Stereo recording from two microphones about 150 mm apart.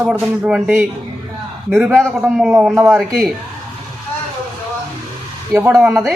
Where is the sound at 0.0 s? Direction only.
5° right (ahead or behind).